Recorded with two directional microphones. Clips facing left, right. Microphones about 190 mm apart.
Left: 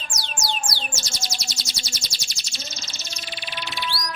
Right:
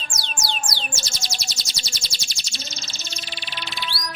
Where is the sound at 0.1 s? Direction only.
30° right (ahead or behind).